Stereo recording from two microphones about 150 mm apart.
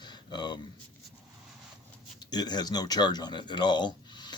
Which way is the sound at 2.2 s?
25° left (ahead or behind).